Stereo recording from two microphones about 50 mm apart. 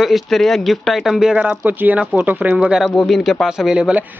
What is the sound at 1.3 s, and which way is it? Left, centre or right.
Speech, right.